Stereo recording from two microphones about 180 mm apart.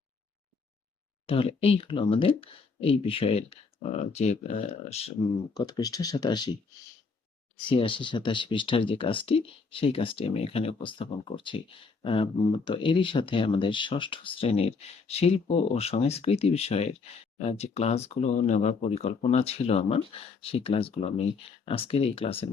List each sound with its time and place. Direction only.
1.3 s speech: 30° left (ahead or behind)
5.5 s speech: 20° left (ahead or behind)
7.7 s speech: 30° left (ahead or behind)